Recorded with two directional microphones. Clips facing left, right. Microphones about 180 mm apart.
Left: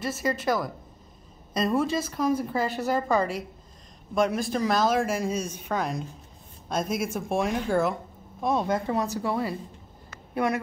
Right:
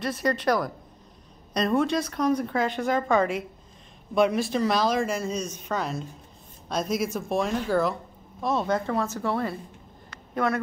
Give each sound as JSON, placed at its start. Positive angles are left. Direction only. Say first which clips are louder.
{"t": 0.0, "sound": "a woman's voice", "louder": "right 2 dB", "side_deg": 5}
{"t": 6.7, "sound": "speech", "louder": "right 1 dB", "side_deg": 50}
{"t": 7.1, "sound": "speech", "louder": "even", "side_deg": 10}